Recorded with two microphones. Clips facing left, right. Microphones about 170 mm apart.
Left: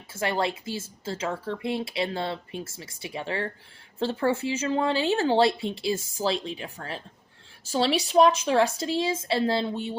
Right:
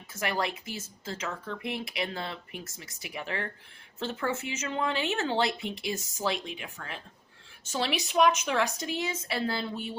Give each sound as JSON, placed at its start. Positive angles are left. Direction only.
{"t": 0.1, "sound": "speech", "side_deg": 30}